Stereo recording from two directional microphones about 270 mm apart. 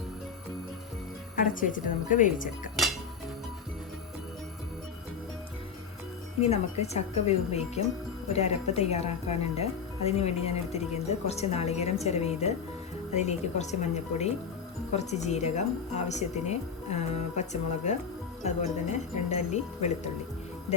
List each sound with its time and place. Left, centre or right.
1.4 s speech: left
6.4 s speech: left